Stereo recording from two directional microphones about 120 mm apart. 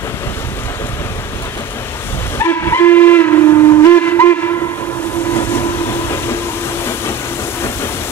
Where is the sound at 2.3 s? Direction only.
20° left (ahead or behind).